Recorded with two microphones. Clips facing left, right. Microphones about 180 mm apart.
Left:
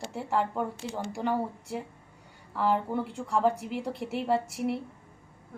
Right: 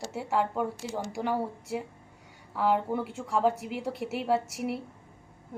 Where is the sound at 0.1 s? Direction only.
5° right (ahead or behind).